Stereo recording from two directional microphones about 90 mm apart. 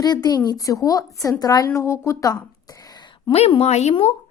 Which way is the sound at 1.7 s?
30° left (ahead or behind).